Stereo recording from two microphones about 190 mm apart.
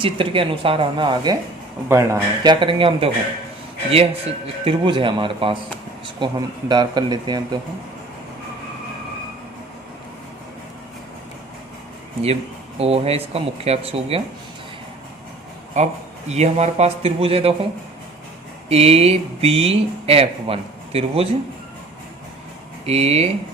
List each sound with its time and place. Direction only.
0.0 s a man's voice: 30° right (ahead or behind)
12.8 s speech: 30° right (ahead or behind)
15.8 s speech: 35° right (ahead or behind)
18.7 s speech: 30° right (ahead or behind)
22.9 s speech: 35° right (ahead or behind)